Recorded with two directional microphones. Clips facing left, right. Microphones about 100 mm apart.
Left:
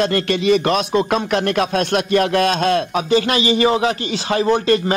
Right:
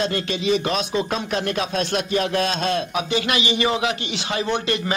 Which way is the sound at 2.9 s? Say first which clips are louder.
Left 6 dB; 40° left (ahead or behind).